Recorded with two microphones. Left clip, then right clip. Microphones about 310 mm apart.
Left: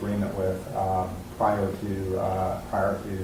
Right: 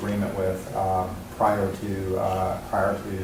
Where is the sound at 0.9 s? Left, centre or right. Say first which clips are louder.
Right 2 dB; centre.